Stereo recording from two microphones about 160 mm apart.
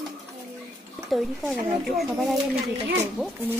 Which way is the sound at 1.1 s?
Centre (ahead or behind).